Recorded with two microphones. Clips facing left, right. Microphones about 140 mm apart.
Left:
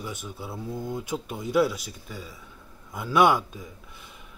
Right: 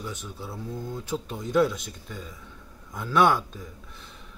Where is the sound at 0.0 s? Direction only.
10° left (ahead or behind).